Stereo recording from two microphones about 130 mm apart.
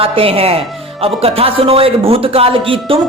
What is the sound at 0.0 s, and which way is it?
A woman's voice, 45° right (ahead or behind).